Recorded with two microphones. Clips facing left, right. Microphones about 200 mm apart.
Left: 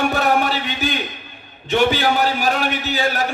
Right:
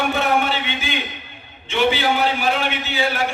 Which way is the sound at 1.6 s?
40° left (ahead or behind).